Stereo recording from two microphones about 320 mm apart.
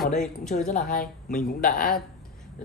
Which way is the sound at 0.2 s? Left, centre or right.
Centre.